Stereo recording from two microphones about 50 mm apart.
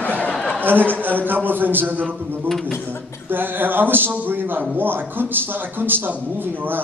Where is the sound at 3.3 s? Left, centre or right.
Right.